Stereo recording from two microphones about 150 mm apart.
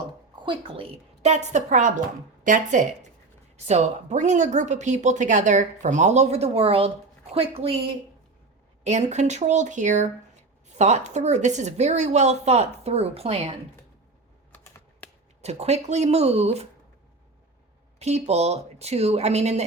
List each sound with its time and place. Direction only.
0.4 s a woman's voice: 35° right (ahead or behind)
15.4 s a woman's voice: 45° right (ahead or behind)
18.0 s a woman's voice: 45° right (ahead or behind)